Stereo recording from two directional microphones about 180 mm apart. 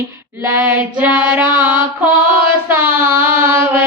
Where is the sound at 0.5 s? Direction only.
10° right (ahead or behind).